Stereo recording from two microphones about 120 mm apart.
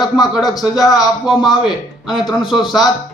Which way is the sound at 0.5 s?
30° left (ahead or behind).